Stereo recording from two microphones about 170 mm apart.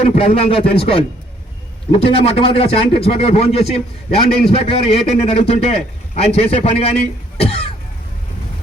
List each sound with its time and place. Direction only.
0.0 s a man's voice: 35° left (ahead or behind)
7.3 s cough: 35° left (ahead or behind)